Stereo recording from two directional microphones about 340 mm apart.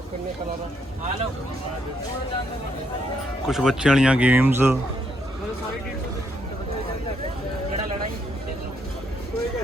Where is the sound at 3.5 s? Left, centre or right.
Centre.